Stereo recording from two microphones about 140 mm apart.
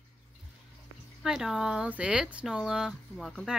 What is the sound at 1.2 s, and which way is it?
Speech, 5° right (ahead or behind).